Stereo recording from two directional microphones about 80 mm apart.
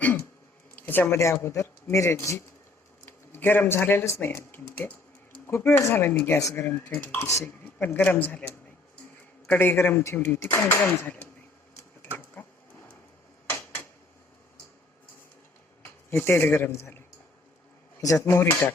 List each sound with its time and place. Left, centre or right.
0.0 s a sound: left
0.8 s speech: left
3.1 s speech: left
12.1 s printer: left
15.8 s a man's voice: left
18.0 s speech: left